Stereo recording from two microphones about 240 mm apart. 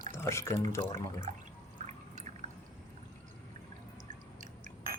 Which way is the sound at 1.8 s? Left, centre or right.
Right.